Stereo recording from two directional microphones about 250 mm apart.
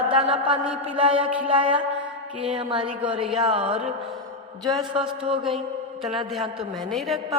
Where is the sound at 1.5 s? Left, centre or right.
Right.